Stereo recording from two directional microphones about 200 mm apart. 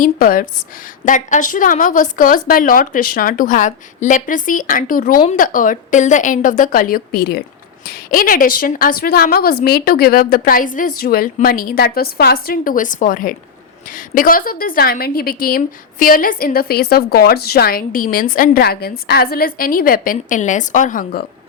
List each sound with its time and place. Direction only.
0.0 s a woman's voice: 45° left (ahead or behind)